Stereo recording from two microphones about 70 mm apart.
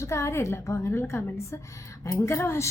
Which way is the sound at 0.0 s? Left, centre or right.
Left.